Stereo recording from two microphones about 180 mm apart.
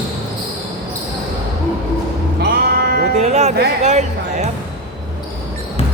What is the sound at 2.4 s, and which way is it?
Sheep, 60° right (ahead or behind).